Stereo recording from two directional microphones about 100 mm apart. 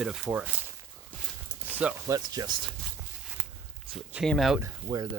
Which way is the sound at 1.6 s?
15° right (ahead or behind).